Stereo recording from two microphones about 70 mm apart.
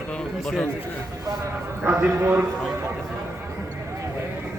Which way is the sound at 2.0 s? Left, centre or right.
Right.